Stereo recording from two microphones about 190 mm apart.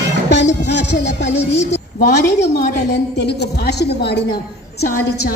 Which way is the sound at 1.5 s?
55° left (ahead or behind).